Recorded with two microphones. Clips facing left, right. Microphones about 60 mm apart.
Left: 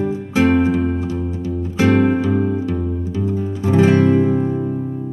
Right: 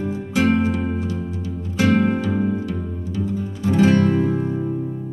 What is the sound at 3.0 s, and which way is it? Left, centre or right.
Music, left.